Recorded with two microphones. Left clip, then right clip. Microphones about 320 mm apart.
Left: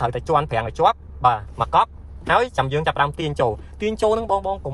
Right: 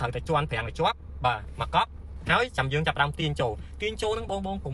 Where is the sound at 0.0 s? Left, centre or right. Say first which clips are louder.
Left 8 dB; left.